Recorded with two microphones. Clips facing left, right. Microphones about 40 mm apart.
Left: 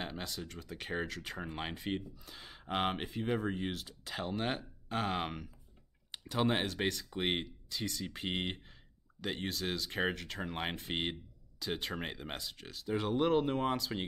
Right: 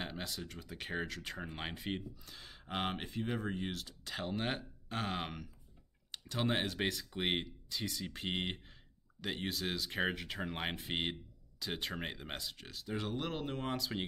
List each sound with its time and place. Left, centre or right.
0.0 s speech: centre
2.3 s a sound: centre
2.6 s speech: centre
13.1 s speech: centre
13.7 s speech: centre